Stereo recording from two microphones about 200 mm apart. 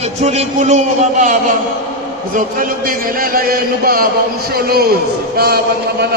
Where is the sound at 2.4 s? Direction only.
45° right (ahead or behind).